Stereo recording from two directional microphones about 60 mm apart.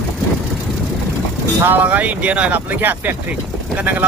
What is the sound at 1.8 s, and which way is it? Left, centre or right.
Speech, right.